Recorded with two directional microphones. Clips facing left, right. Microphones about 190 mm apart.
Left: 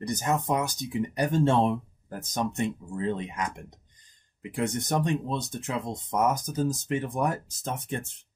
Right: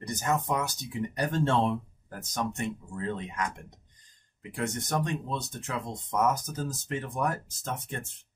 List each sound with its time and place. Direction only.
0.0 s speech: 20° left (ahead or behind)